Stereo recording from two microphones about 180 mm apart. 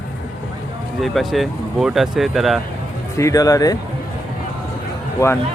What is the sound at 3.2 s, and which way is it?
Speech, 20° left (ahead or behind).